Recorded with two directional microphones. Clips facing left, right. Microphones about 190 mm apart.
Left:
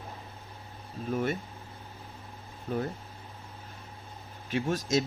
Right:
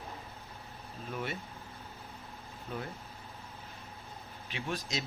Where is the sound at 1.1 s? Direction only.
45° left (ahead or behind).